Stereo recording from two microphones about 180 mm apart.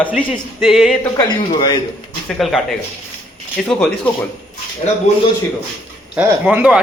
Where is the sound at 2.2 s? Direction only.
Centre (ahead or behind).